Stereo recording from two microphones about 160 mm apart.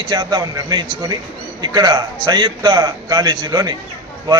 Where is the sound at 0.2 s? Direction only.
25° right (ahead or behind).